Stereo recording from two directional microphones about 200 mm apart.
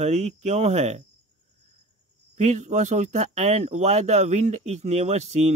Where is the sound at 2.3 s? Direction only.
35° right (ahead or behind).